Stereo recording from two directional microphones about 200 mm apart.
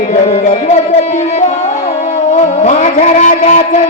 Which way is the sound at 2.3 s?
35° left (ahead or behind).